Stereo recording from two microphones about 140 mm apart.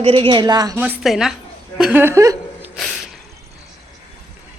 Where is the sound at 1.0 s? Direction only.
Centre (ahead or behind).